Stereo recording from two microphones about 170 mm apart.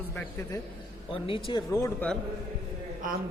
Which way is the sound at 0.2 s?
15° left (ahead or behind).